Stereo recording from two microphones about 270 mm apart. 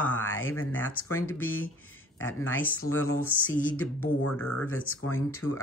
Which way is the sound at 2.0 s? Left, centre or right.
Left.